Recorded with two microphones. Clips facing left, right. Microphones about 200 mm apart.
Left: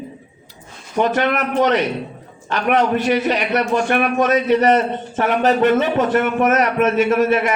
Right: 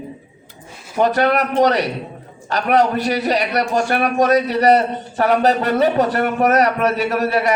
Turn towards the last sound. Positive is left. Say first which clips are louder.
# left 2 dB
turn(degrees=-35)  # may be behind; listen again after turning